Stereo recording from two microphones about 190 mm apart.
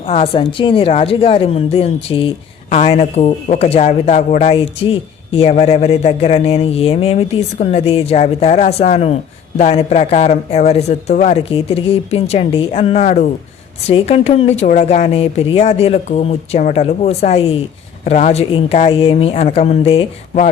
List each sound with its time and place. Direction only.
0.1 s a woman's voice: 30° left (ahead or behind)